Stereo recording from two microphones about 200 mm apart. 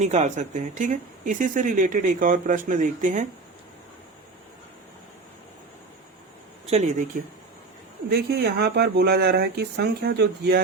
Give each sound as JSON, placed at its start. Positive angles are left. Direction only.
{"t": 0.0, "sound": "speech", "side_deg": -35}
{"t": 6.7, "sound": "speech", "side_deg": -30}
{"t": 8.1, "sound": "speech", "side_deg": -55}